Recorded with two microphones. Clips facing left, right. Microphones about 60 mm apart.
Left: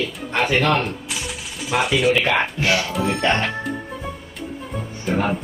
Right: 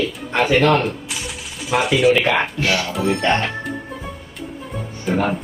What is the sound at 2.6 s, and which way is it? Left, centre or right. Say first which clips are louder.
Speech: even; centre.